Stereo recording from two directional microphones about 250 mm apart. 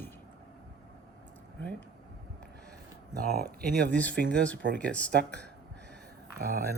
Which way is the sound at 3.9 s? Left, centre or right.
Centre.